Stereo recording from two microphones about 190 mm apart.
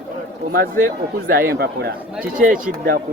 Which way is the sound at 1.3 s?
55° right (ahead or behind).